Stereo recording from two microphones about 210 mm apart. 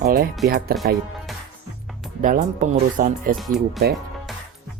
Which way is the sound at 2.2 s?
40° right (ahead or behind).